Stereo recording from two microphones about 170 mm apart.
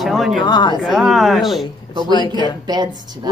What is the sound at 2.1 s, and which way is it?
Speech, 25° left (ahead or behind).